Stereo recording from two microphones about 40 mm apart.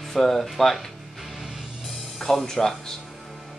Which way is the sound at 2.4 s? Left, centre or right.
Centre.